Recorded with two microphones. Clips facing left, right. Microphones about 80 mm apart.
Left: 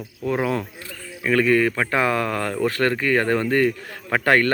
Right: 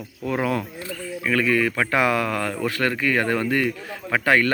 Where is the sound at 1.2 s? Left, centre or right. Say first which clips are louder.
Left 3 dB; left.